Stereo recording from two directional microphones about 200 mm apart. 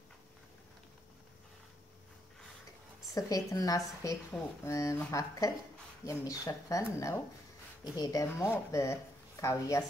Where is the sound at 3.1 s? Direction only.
15° left (ahead or behind).